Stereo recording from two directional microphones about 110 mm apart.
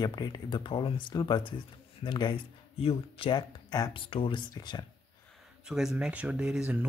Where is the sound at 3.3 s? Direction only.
40° left (ahead or behind).